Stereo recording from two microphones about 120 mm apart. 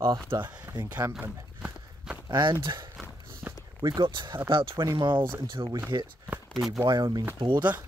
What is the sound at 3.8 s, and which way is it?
Speech, 40° right (ahead or behind).